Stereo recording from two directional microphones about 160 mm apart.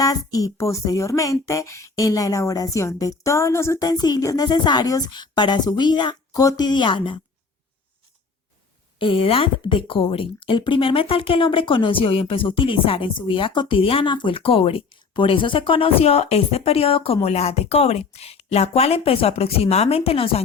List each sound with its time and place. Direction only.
0.0 s speech: 20° left (ahead or behind)
9.0 s speech: 35° left (ahead or behind)